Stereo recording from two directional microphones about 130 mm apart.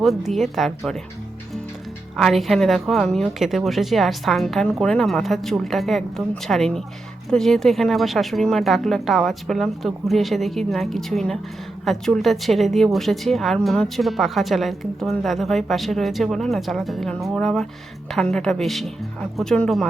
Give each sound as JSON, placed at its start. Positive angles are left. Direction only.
{"t": 0.0, "sound": "a woman's voice", "side_deg": 0}
{"t": 2.1, "sound": "a woman's voice", "side_deg": 0}